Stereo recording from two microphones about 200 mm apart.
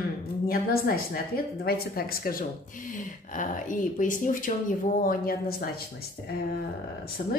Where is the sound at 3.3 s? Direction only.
40° left (ahead or behind).